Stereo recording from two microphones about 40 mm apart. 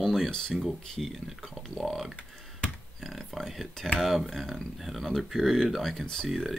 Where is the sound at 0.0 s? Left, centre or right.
Centre.